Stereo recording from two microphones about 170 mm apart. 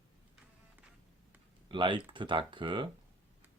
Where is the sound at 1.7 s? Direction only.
30° right (ahead or behind).